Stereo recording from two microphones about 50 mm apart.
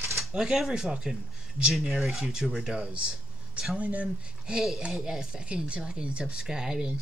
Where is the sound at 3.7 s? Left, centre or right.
Right.